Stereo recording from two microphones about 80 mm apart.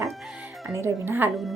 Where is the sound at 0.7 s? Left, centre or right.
Right.